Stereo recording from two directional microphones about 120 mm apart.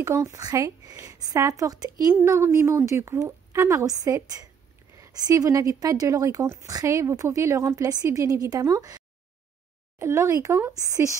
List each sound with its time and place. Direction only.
0.0 s speech: 25° right (ahead or behind)
2.1 s speech: 20° right (ahead or behind)